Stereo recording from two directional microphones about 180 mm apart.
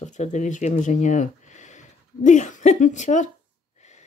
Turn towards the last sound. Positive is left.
turn(degrees=40)  # may be behind; listen again after turning